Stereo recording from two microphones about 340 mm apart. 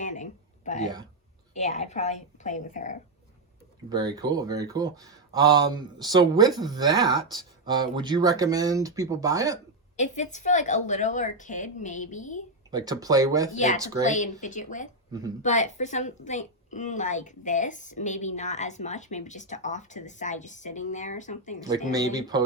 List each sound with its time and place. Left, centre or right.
0.0 s a sound: left
1.5 s a woman's voice: centre
3.8 s speech: centre
10.0 s a woman's voice: left
12.7 s speech: centre
14.0 s a woman's voice: left
21.9 s speech: centre